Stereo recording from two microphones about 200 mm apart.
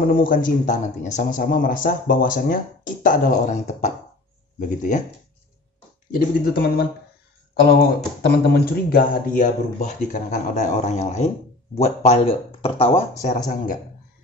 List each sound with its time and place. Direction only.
0.0 s a man's voice: 45° left (ahead or behind)
6.1 s a man's voice: 50° left (ahead or behind)